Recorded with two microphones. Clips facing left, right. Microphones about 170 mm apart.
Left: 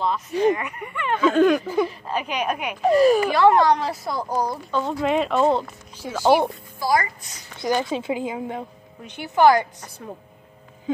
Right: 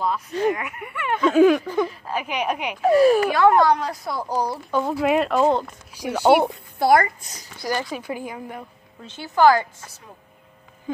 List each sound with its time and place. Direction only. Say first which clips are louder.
0.3 s speech: left 3 dB; 15° left (ahead or behind)
0.6 s speech: left 1 dB; 5° right (ahead or behind)
1.7 s speech: left 1 dB; 10° left (ahead or behind)
2.0 s a woman's voice: even; 10° right (ahead or behind)
2.8 s speech: right 1 dB; centre (ahead or behind)
6.8 s a child's voice: right 5 dB; 60° right (ahead or behind)
7.5 s speech: left 4 dB; 20° left (ahead or behind)